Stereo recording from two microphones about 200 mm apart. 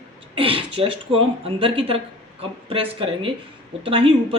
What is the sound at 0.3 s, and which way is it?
Speech, 25° right (ahead or behind).